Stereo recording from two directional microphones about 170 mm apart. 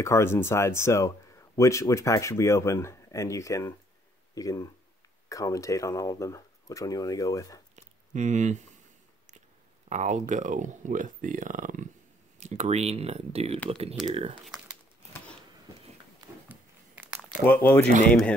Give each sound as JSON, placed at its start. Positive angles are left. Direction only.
{"t": 0.0, "sound": "speech", "side_deg": 15}
{"t": 7.7, "sound": "a sound", "side_deg": -45}
{"t": 9.8, "sound": "speech", "side_deg": -45}
{"t": 14.4, "sound": "crumpling", "side_deg": -5}
{"t": 16.4, "sound": "crumpling", "side_deg": -10}
{"t": 17.5, "sound": "speech", "side_deg": 10}